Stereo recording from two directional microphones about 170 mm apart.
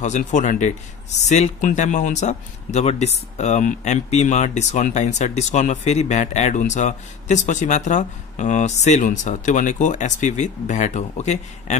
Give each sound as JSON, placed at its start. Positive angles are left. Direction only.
{"t": 0.0, "sound": "speech", "side_deg": 45}